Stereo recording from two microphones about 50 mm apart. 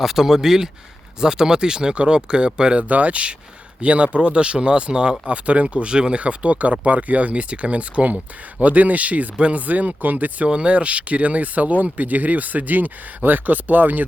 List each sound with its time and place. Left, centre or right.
0.0 s speech: centre; by 10.5 s right
10.5 s speech: right